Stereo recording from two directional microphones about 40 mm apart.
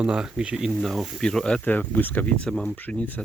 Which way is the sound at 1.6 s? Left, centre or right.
Left.